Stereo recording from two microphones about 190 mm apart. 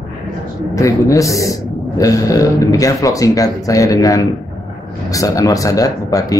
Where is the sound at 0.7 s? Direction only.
15° left (ahead or behind).